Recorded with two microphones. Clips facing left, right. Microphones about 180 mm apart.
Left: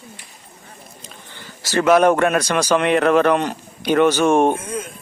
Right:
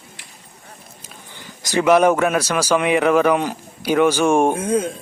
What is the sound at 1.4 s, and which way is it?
Speech, 15° right (ahead or behind).